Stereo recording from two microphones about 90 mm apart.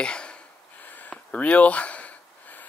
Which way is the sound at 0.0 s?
10° left (ahead or behind).